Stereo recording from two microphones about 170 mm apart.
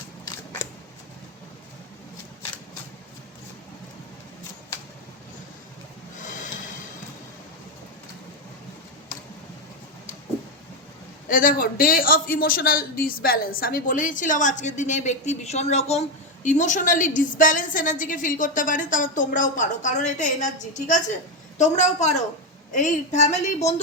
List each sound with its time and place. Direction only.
6.1 s snort: 50° left (ahead or behind)
11.3 s a man's voice: 55° left (ahead or behind)